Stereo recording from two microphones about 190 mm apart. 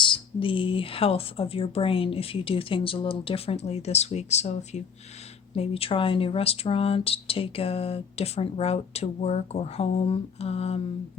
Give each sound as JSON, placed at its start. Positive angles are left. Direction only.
{"t": 0.0, "sound": "speech", "side_deg": 25}